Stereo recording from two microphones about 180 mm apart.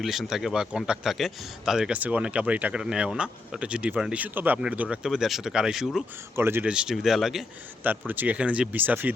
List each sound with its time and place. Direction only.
0.0 s speech: centre (ahead or behind)
6.3 s speech: 10° right (ahead or behind)